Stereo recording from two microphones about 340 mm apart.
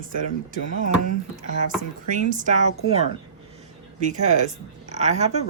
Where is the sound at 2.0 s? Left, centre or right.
Right.